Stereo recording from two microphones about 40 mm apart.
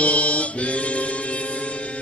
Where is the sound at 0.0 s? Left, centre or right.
Left.